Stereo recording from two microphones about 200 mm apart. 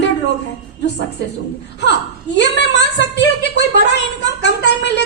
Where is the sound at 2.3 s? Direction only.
60° left (ahead or behind).